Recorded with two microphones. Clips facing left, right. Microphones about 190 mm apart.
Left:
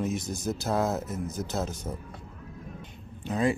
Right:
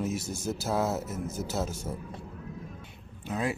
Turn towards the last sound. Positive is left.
turn(degrees=-5)  # may be behind; listen again after turning